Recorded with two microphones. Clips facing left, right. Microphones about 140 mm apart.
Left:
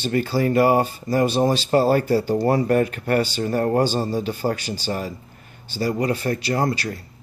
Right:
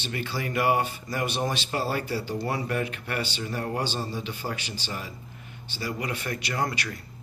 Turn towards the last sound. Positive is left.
turn(degrees=35)  # may be behind; listen again after turning